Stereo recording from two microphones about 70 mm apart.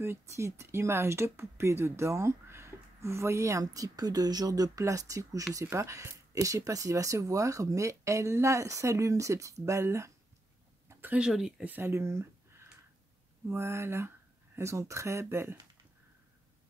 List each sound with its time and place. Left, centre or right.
0.0 s speech: right
10.9 s a sound: right
11.1 s speech: centre
11.8 s speech: right